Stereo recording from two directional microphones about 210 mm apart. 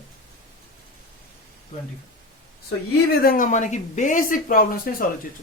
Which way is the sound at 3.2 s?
40° left (ahead or behind).